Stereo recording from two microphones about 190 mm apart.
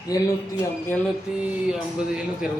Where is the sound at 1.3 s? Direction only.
5° right (ahead or behind).